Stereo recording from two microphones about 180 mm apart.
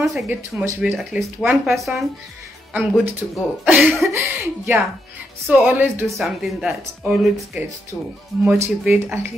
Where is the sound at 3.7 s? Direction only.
5° right (ahead or behind).